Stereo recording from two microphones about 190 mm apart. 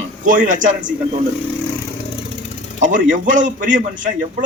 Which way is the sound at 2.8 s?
40° right (ahead or behind).